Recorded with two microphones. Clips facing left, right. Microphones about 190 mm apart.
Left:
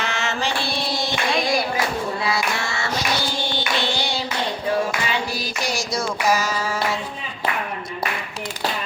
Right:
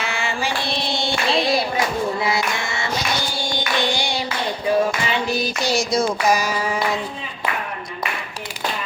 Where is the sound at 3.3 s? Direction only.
15° right (ahead or behind).